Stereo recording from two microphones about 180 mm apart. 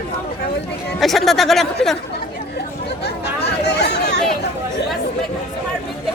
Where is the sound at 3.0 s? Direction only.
65° left (ahead or behind).